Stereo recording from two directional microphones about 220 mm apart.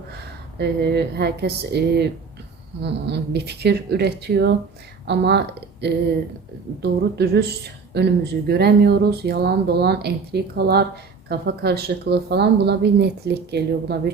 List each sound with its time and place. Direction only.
0.2 s a woman's voice: 50° right (ahead or behind)